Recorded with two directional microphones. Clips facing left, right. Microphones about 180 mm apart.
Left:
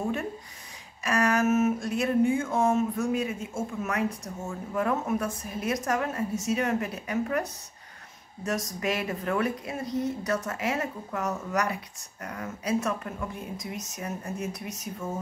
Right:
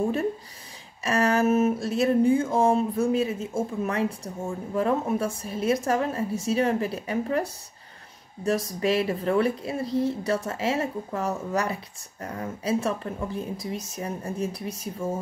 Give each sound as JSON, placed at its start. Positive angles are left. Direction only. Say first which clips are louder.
{"t": 1.0, "sound": "a woman's voice", "louder": "right 2 dB", "side_deg": -30}